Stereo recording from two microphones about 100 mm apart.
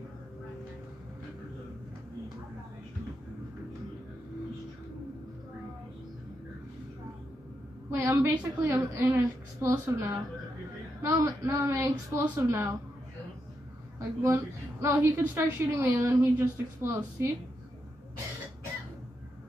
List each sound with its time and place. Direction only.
7.9 s a woman's voice: 25° right (ahead or behind)
13.9 s a woman's voice: 30° right (ahead or behind)